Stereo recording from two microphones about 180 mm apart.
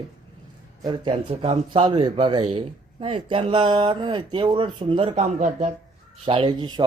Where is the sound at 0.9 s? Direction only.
30° right (ahead or behind).